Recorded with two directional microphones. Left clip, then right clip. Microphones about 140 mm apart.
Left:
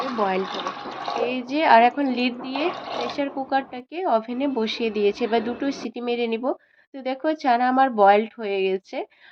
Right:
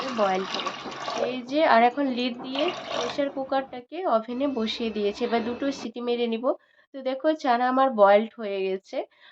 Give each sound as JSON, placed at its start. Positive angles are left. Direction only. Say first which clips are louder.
{"t": 0.3, "sound": "speech", "louder": "left 1 dB", "side_deg": 15}